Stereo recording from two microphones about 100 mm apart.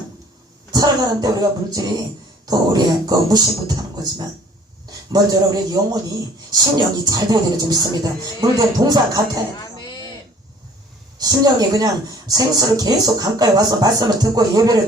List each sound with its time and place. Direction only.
0.7 s speech: 40° right (ahead or behind)
5.1 s speech: 40° right (ahead or behind)
9.6 s a sound: 45° left (ahead or behind)
11.2 s speech: 40° right (ahead or behind)